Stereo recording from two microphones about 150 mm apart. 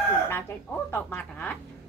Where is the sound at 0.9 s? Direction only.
10° left (ahead or behind).